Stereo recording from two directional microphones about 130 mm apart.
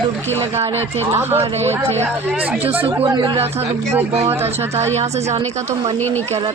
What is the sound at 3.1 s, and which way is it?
Speech, 35° right (ahead or behind).